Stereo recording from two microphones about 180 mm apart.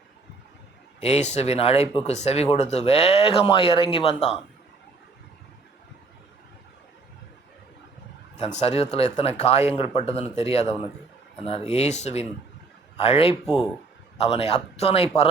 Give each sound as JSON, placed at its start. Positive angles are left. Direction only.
{"t": 1.0, "sound": "speech", "side_deg": 40}
{"t": 8.4, "sound": "speech", "side_deg": 35}